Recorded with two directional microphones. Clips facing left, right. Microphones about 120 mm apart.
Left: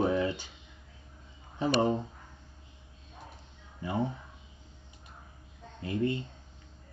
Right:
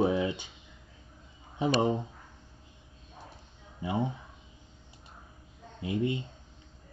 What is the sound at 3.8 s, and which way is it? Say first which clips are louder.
Speech: right 1 dB; 15° right (ahead or behind).